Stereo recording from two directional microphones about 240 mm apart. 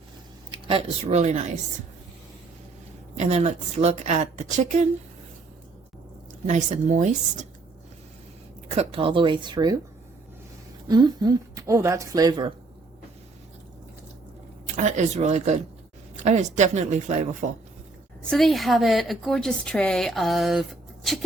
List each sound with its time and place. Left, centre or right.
0.5 s a woman's voice: right
3.2 s a woman's voice: right
6.5 s a woman's voice: right
8.7 s a woman's voice: right
10.8 s a woman's voice: centre
14.8 s a woman's voice: right
18.3 s a woman's voice: centre